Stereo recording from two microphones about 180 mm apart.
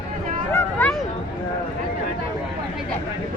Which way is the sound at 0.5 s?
10° left (ahead or behind).